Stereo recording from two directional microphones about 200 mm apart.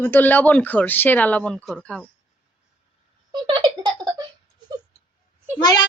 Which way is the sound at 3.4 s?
20° right (ahead or behind).